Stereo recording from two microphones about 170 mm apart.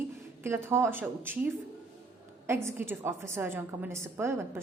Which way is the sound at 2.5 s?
15° right (ahead or behind).